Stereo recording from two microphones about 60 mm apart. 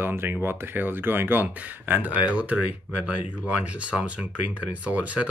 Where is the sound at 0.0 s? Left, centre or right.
Right.